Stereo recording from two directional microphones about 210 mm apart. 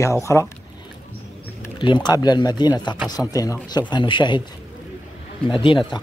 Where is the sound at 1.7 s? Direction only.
20° left (ahead or behind).